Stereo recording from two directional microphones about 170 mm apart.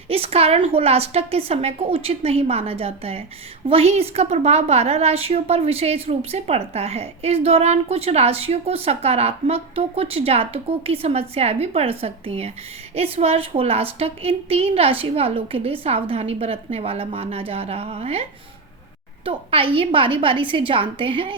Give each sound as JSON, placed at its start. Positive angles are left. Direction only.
{"t": 0.1, "sound": "a woman's voice", "side_deg": -35}